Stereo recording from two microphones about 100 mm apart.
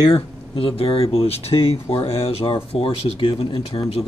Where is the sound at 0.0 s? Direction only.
60° left (ahead or behind).